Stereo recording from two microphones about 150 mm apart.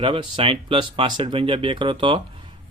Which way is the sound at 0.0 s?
35° right (ahead or behind).